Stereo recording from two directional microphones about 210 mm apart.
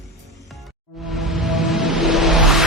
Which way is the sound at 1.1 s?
Centre (ahead or behind).